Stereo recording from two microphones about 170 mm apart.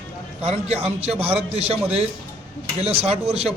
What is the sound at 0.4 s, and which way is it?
A man's voice, 40° right (ahead or behind).